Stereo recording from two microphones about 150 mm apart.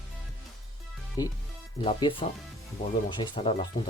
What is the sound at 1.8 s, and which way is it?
Speech, 35° left (ahead or behind).